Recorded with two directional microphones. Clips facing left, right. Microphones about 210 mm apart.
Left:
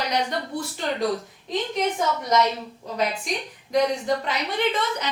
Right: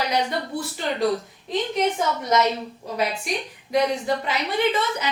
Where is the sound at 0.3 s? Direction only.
5° right (ahead or behind).